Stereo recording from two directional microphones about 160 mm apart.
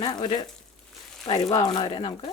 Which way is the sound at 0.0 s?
25° left (ahead or behind).